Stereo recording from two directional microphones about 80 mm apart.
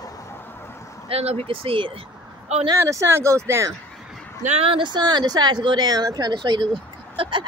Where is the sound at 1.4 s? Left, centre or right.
Right.